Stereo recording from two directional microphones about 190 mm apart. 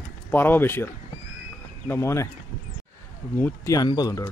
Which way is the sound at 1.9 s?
15° left (ahead or behind).